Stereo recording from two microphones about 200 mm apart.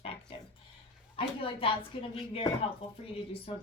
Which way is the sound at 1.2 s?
25° left (ahead or behind).